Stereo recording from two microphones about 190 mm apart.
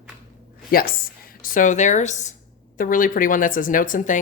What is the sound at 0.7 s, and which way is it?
Speech, 50° left (ahead or behind).